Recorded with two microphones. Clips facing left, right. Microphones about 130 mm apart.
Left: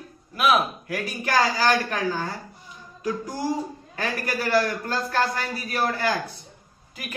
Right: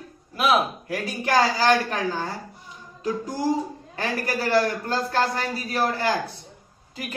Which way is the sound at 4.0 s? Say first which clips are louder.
Right 1 dB; 30° right (ahead or behind).